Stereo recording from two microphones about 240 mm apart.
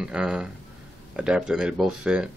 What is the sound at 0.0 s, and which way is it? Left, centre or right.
Speech, centre.